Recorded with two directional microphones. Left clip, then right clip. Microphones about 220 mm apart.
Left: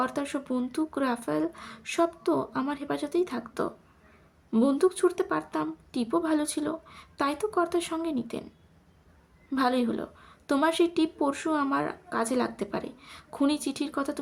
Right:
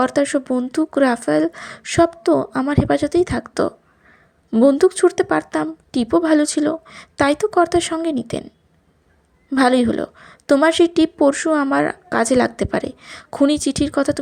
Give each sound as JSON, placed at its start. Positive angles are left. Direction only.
{"t": 0.0, "sound": "a woman's voice", "side_deg": -30}
{"t": 9.5, "sound": "a woman's voice", "side_deg": -30}